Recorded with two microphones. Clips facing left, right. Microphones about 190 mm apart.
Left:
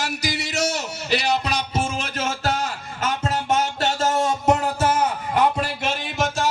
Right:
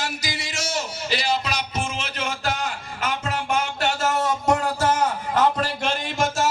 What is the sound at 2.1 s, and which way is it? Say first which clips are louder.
Music: left 3 dB; 45° left (ahead or behind).